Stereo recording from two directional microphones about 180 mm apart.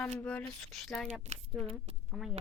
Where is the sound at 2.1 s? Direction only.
Centre (ahead or behind).